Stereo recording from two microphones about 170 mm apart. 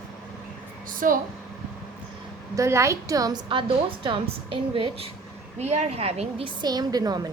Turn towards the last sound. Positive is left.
turn(degrees=-25)  # may be behind; listen again after turning